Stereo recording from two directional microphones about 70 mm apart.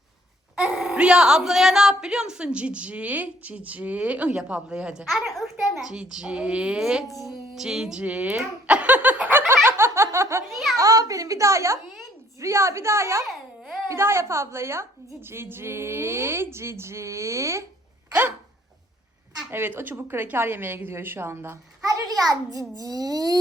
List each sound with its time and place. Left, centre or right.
0.5 s a sound: centre
0.9 s a woman's voice: centre
8.4 s laughter: centre
9.6 s snicker: right
10.5 s a sound: centre
10.8 s a woman's voice: right
18.1 s dog: right
19.5 s speech: right
21.8 s a child's voice: right